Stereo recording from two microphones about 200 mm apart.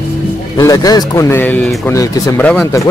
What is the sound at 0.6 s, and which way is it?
Speech, 15° left (ahead or behind).